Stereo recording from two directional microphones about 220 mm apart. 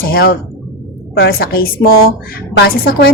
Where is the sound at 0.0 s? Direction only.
45° left (ahead or behind).